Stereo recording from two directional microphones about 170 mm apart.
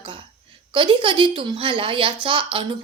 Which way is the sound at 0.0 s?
30° right (ahead or behind).